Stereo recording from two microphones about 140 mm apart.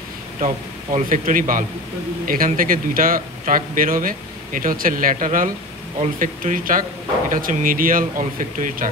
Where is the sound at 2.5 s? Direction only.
90° right.